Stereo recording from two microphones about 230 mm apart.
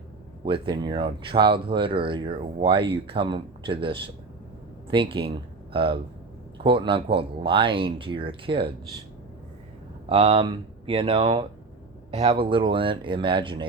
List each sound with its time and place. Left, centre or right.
0.4 s speech: right
10.1 s speech: right